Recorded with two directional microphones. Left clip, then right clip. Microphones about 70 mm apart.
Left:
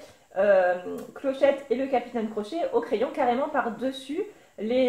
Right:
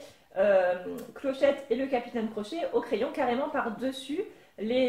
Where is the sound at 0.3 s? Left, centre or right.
Centre.